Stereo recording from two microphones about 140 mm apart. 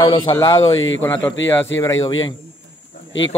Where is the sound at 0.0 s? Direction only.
35° left (ahead or behind).